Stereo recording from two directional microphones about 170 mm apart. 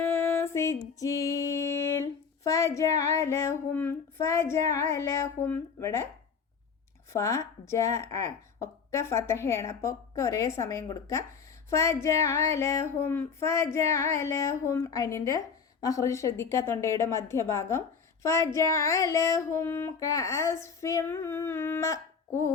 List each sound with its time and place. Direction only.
0.0 s female singing: 10° left (ahead or behind)
7.1 s a woman's voice: 15° left (ahead or behind)